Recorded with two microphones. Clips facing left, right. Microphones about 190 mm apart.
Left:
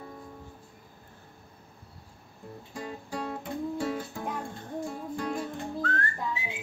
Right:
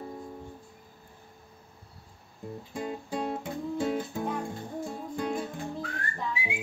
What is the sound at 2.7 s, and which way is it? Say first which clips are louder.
Music: right 3 dB; 20° right (ahead or behind).